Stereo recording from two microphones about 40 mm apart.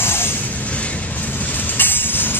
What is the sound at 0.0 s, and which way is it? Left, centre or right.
Music, left.